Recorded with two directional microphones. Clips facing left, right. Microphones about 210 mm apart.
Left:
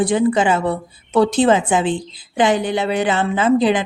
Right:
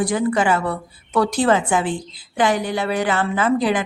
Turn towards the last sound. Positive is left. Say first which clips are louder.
# left 3 dB
turn(degrees=20)  # may be behind; listen again after turning